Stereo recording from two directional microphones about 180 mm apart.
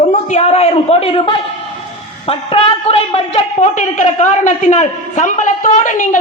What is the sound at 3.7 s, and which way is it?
A woman's voice, 45° left (ahead or behind).